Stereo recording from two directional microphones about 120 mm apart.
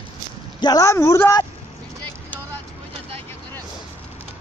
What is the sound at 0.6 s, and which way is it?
Speech, 35° left (ahead or behind).